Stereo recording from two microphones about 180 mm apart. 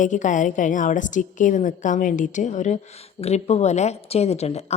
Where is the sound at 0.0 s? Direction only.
45° left (ahead or behind).